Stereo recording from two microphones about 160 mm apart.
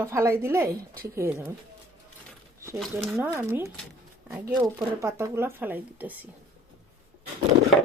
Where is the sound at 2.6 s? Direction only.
15° right (ahead or behind).